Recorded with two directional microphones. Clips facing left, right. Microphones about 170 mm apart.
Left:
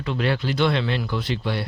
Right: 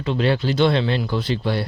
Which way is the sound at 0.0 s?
30° right (ahead or behind).